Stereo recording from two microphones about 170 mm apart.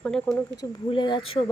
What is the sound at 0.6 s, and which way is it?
Speech, 25° left (ahead or behind).